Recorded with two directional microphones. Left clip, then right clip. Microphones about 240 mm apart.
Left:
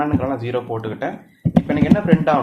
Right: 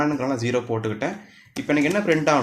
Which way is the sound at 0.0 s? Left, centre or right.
Right.